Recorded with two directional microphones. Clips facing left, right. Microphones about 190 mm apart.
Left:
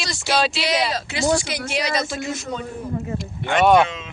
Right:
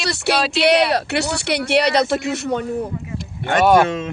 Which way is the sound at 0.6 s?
65° right (ahead or behind).